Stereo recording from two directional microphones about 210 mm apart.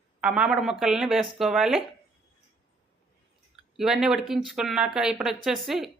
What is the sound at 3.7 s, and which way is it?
Speech, centre (ahead or behind).